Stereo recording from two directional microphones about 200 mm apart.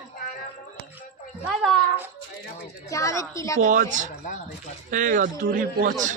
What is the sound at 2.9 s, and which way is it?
Speech, 15° left (ahead or behind).